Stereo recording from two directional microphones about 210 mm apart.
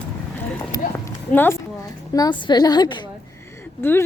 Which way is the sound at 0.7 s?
15° left (ahead or behind).